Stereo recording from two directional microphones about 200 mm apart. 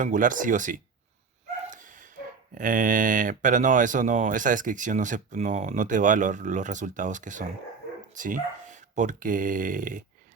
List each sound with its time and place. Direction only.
0.0 s speech: 40° right (ahead or behind)
1.7 s dog: 40° right (ahead or behind)
2.6 s speech: 45° right (ahead or behind)